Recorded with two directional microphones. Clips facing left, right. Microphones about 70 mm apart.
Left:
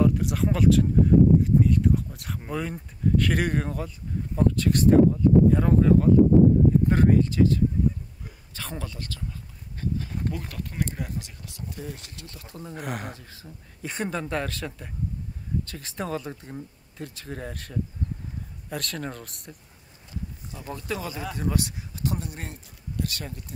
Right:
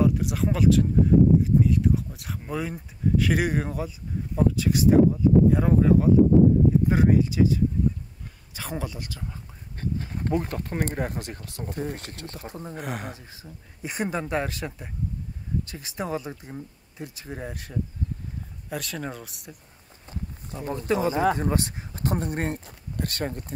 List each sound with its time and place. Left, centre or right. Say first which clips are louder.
0.0 s speech: even; centre
9.8 s speech: even; right
12.4 s speech: right 2 dB; right
12.7 s speech: left 1 dB; centre
13.1 s speech: right 1 dB; centre
20.5 s speech: right 7 dB; right